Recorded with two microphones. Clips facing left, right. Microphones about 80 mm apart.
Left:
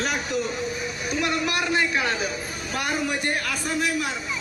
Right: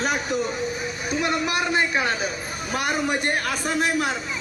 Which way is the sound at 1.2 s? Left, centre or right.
Right.